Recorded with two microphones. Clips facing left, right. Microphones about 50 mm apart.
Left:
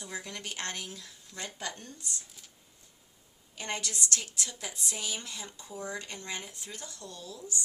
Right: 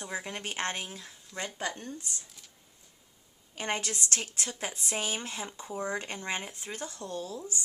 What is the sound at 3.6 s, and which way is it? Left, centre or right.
Speech, right.